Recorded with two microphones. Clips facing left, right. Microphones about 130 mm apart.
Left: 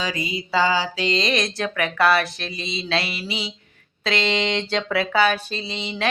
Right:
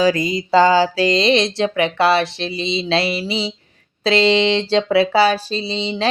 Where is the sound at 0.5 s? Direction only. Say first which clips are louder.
Right 8 dB; 45° right (ahead or behind).